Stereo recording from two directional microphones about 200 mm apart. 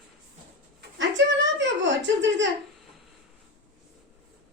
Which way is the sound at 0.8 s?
65° right (ahead or behind).